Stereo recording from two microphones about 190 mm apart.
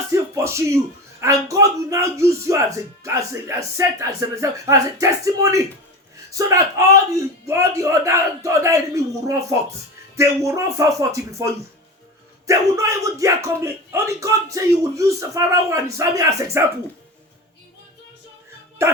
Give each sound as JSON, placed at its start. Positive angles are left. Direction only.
{"t": 0.1, "sound": "music", "side_deg": -15}
{"t": 1.2, "sound": "speech", "side_deg": -15}
{"t": 10.2, "sound": "speech", "side_deg": -15}
{"t": 18.8, "sound": "speech", "side_deg": -15}